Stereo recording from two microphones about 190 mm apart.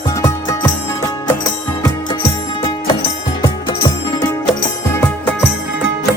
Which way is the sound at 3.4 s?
20° left (ahead or behind).